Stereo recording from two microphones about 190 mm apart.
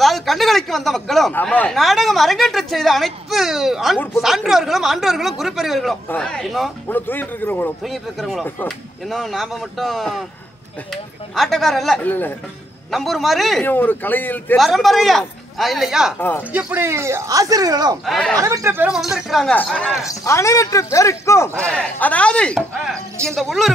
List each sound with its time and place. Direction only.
0.0 s speech: centre (ahead or behind)
8.5 s speech: 10° left (ahead or behind)
13.7 s speech: 10° left (ahead or behind)
16.2 s speech: 10° left (ahead or behind)
16.5 s speech: 10° right (ahead or behind)
18.0 s speech: 5° left (ahead or behind)
18.4 s speech: 15° right (ahead or behind); by 19.7 s 5° left (ahead or behind)
20.0 s speech: 15° left (ahead or behind)